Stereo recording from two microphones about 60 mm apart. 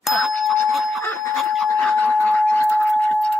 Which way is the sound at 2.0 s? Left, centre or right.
Left.